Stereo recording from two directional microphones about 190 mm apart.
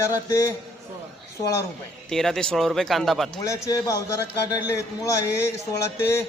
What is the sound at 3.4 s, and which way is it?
Speech, 15° left (ahead or behind).